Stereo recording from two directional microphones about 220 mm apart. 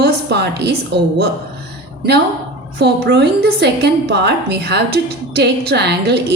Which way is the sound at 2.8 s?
45° right (ahead or behind).